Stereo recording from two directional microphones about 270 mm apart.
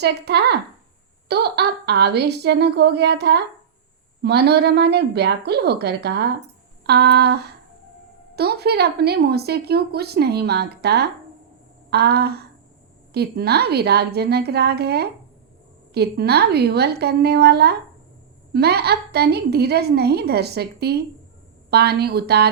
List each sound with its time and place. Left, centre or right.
0.0 s a woman's voice: right
11.9 s a sound: right
13.1 s a woman's voice: right